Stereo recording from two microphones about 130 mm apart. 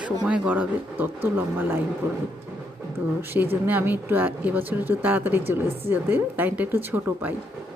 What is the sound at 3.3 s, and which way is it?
Speech, 15° right (ahead or behind).